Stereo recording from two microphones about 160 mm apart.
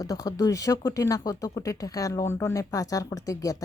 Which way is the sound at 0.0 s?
20° left (ahead or behind).